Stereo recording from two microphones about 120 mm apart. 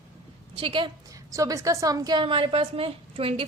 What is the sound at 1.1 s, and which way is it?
A woman's voice, 30° right (ahead or behind).